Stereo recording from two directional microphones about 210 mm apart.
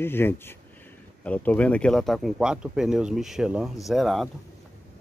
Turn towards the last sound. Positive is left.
turn(degrees=0)  # may be behind; listen again after turning